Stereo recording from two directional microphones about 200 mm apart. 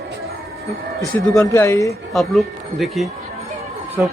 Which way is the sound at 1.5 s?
15° left (ahead or behind).